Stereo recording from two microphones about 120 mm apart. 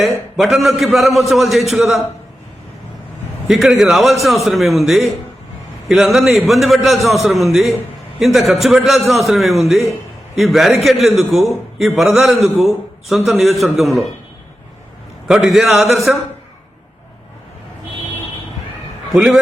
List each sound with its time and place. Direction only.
0.3 s a man's voice: centre (ahead or behind)
3.4 s a man's voice: centre (ahead or behind)
15.3 s a man's voice: 5° right (ahead or behind)
19.1 s a man's voice: 5° right (ahead or behind)